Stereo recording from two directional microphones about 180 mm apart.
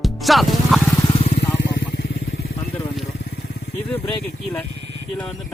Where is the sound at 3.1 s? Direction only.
90° left.